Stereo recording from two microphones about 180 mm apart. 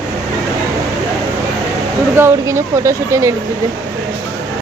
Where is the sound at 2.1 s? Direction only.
15° right (ahead or behind).